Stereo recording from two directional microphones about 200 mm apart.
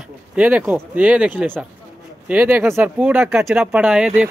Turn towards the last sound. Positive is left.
turn(degrees=-5)  # may be behind; listen again after turning